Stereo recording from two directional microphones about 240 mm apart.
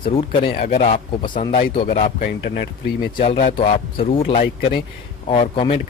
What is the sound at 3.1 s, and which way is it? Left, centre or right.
Speech, left.